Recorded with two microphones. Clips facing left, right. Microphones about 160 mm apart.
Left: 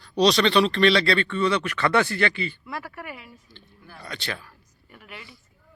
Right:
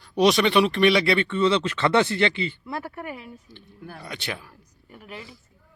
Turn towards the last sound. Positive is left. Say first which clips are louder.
# right 4 dB
turn(degrees=-30)  # may be behind; listen again after turning